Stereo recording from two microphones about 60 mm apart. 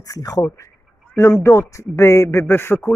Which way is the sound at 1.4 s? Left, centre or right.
Left.